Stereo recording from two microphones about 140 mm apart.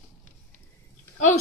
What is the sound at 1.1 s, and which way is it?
Speech, 60° left (ahead or behind).